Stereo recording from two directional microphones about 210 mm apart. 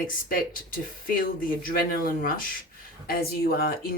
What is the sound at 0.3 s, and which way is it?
Speech, 40° left (ahead or behind).